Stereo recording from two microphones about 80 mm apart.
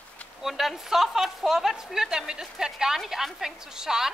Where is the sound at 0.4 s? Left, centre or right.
Centre.